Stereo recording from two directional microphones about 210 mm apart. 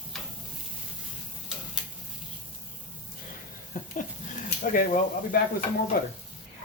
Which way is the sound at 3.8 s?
40° left (ahead or behind).